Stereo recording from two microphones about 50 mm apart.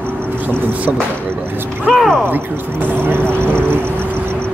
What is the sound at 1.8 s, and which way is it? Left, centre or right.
Speech, centre.